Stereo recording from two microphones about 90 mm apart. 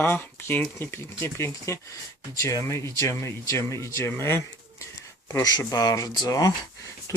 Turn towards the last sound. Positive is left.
turn(degrees=45)  # may be behind; listen again after turning